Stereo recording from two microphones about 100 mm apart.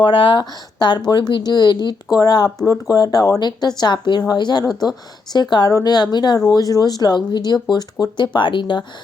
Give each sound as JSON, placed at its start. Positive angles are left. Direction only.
{"t": 0.0, "sound": "a woman's voice", "side_deg": 55}